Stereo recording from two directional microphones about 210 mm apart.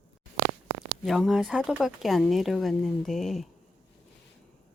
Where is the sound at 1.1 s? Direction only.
Centre (ahead or behind).